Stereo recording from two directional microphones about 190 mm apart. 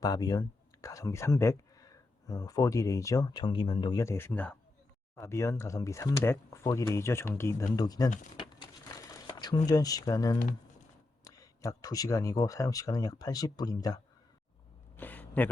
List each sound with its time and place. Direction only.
0.0 s speech: 20° left (ahead or behind)
8.4 s crumpling: 25° left (ahead or behind)
11.2 s speech: 15° left (ahead or behind)
14.9 s a sound: 10° left (ahead or behind)